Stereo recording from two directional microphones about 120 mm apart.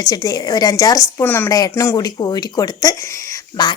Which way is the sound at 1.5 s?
30° left (ahead or behind).